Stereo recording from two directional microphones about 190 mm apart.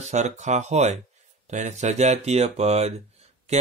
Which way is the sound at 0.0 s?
35° right (ahead or behind).